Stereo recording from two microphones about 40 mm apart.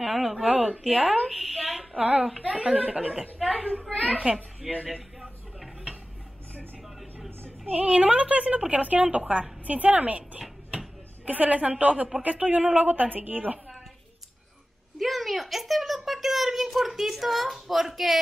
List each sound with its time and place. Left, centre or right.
0.0 s a woman's voice: centre
1.3 s a sound: centre
2.0 s a woman's voice: right
3.4 s a woman's voice: centre
4.2 s a child's voice: right
7.7 s a woman's voice: right
8.0 s a woman's voice: right
15.0 s a child's voice: centre